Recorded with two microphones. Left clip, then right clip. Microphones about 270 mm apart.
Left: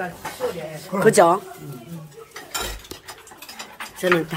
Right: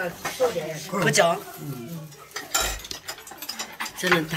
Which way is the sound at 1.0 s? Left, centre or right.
Left.